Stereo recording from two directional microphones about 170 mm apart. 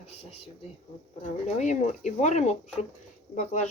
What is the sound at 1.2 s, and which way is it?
Speech, 45° left (ahead or behind).